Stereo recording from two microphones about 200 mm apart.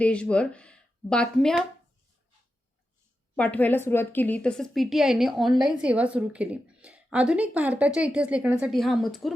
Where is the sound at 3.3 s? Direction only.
5° left (ahead or behind).